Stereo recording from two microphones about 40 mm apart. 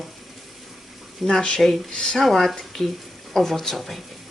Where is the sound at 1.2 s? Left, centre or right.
Centre.